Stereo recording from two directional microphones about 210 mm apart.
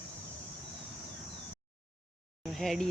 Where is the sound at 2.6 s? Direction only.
Centre (ahead or behind).